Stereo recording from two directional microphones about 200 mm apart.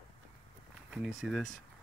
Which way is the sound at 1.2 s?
Centre (ahead or behind).